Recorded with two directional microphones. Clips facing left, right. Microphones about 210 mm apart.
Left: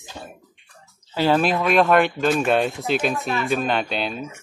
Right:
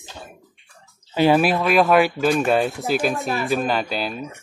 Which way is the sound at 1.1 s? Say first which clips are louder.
Right 3 dB; 15° right (ahead or behind).